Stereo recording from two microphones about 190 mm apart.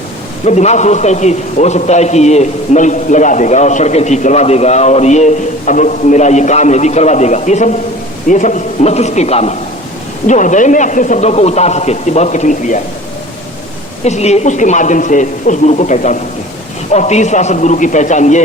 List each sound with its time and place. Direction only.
0.4 s a man's voice: 35° left (ahead or behind)
14.0 s a man's voice: 35° left (ahead or behind)